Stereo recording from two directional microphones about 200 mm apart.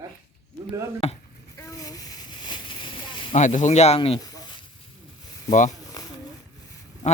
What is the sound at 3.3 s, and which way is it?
Speech, 35° left (ahead or behind).